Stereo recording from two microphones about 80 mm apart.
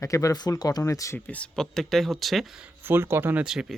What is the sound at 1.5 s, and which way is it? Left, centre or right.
Speech, centre.